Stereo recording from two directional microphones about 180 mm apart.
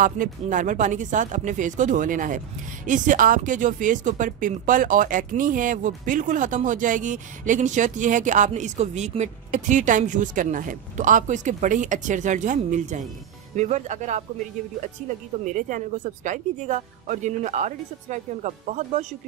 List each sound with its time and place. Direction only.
0.0 s speech: 45° right (ahead or behind)